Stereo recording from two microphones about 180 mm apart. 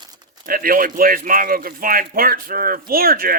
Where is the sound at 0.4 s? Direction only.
50° right (ahead or behind).